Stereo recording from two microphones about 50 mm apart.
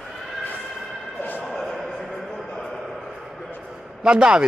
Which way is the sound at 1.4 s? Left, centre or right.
Centre.